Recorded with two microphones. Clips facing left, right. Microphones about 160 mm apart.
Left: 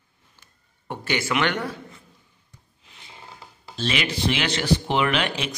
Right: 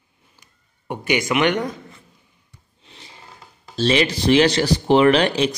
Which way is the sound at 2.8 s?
30° right (ahead or behind).